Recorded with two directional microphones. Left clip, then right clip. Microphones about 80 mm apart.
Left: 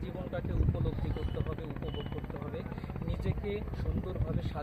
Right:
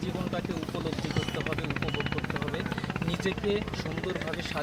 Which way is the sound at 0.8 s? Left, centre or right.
Centre.